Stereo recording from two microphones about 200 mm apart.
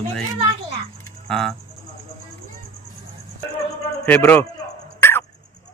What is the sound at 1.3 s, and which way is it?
Speech, 5° left (ahead or behind).